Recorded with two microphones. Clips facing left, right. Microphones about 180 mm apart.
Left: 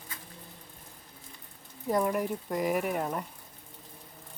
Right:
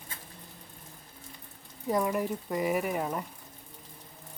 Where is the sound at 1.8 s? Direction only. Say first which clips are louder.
Even; centre (ahead or behind).